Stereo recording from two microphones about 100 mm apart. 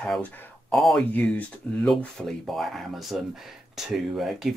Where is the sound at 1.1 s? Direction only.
15° left (ahead or behind).